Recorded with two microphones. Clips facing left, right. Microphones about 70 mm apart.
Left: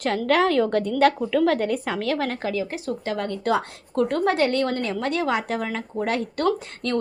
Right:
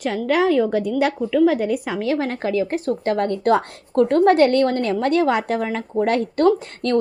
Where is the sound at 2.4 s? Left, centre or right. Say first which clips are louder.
Right 6 dB; right.